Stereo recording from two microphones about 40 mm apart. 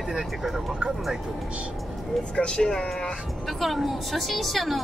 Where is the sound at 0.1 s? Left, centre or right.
Centre.